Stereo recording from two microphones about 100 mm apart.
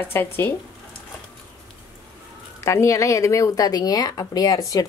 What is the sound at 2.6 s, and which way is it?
A woman's voice, 30° left (ahead or behind).